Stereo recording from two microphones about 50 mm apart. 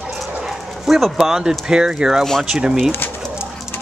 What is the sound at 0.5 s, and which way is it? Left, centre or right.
Speech, centre.